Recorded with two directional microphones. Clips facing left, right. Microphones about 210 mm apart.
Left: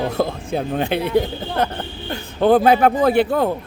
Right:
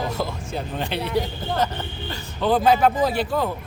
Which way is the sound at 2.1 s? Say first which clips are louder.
Left 7 dB; 55° left (ahead or behind).